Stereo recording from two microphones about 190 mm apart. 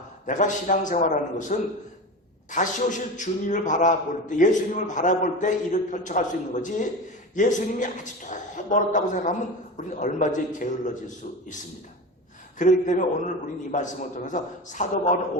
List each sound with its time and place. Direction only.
0.3 s a man's voice: 40° left (ahead or behind)
3.2 s a man's voice: 40° left (ahead or behind)
12.5 s a man's voice: 40° left (ahead or behind)